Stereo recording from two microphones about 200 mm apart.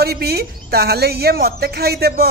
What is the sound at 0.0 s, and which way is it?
A woman's voice, 50° right (ahead or behind).